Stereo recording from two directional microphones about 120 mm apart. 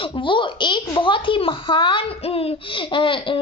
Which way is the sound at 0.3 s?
45° left (ahead or behind).